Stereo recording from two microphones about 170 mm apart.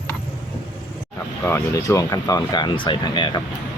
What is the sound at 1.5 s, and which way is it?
Speech, 15° left (ahead or behind).